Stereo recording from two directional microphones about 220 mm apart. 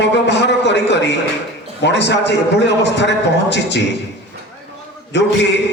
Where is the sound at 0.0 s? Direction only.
50° left (ahead or behind).